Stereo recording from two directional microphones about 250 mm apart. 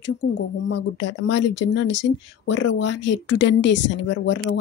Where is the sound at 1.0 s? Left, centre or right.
Left.